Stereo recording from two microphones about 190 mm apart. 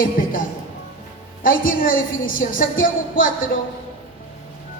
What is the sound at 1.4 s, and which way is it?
A woman's voice, 45° left (ahead or behind).